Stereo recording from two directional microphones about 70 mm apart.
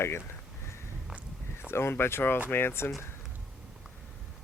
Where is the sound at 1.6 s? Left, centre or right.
Left.